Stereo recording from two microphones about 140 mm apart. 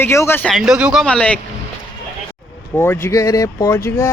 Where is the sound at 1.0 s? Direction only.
5° left (ahead or behind).